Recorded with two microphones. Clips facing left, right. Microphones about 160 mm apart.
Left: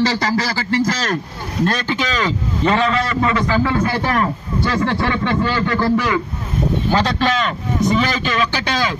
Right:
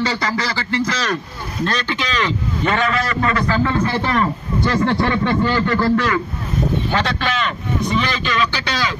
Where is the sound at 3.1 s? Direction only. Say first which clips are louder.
Left 1 dB; 15° left (ahead or behind).